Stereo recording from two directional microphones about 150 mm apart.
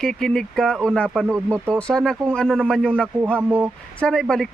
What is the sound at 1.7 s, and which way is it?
A man's voice, 5° left (ahead or behind).